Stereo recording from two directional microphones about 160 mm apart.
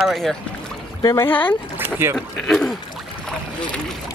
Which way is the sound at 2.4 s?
Centre (ahead or behind).